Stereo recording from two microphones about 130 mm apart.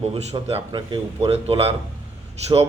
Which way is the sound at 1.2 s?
50° right (ahead or behind).